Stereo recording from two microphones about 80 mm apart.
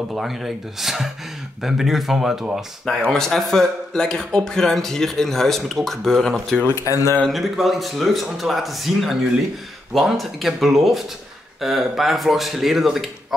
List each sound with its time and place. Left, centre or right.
0.1 s speech: centre
6.7 s speech: left
7.2 s speech: centre